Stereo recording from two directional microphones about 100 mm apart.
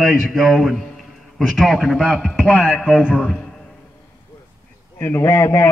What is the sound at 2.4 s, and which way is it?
Speech, 15° left (ahead or behind).